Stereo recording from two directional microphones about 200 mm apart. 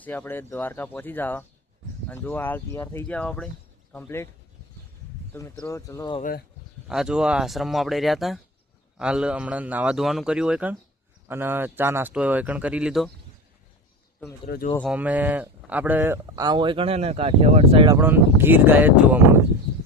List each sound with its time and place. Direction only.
0.0 s speech: 10° left (ahead or behind)
5.3 s speech: 15° left (ahead or behind)
6.8 s a man's voice: 5° right (ahead or behind)
14.4 s speech: 55° left (ahead or behind)
14.9 s speech: 10° right (ahead or behind); by 17.8 s 30° right (ahead or behind)
17.8 s speech: 10° right (ahead or behind)